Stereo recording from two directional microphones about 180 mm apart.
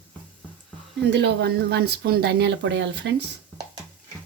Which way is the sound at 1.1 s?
70° right (ahead or behind).